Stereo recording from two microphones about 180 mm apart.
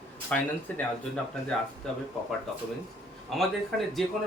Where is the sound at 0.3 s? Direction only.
5° left (ahead or behind).